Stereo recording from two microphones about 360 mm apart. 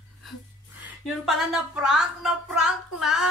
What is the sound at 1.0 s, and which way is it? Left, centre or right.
Speech, centre.